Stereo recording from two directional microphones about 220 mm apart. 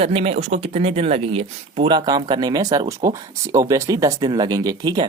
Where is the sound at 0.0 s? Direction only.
25° right (ahead or behind).